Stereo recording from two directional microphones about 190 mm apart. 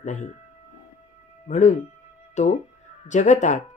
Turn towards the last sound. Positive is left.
turn(degrees=40)  # may be behind; listen again after turning